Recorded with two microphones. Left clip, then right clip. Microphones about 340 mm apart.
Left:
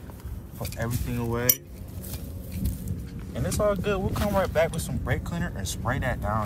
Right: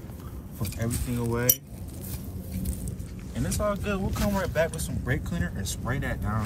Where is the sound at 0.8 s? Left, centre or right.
Left.